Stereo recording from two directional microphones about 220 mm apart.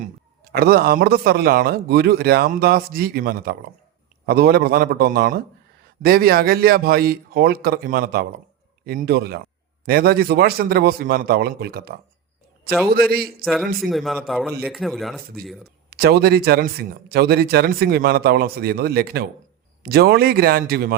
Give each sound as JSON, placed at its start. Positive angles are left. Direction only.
{"t": 0.5, "sound": "speech", "side_deg": -45}
{"t": 13.4, "sound": "a man's voice", "side_deg": 0}
{"t": 15.9, "sound": "speech", "side_deg": -45}